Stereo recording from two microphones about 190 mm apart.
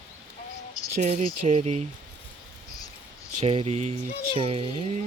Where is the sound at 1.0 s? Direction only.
40° right (ahead or behind).